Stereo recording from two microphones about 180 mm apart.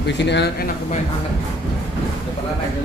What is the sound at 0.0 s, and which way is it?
Speech, 70° left (ahead or behind).